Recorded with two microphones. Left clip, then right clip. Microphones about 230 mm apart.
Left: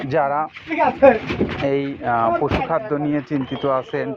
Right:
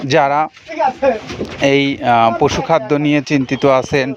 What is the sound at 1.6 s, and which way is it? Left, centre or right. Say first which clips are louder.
Speech: right 11 dB; right.